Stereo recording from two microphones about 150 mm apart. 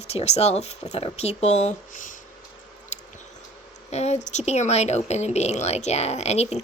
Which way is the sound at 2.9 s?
50° left (ahead or behind).